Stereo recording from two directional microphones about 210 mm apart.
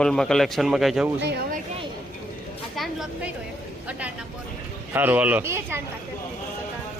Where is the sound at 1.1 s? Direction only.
50° right (ahead or behind).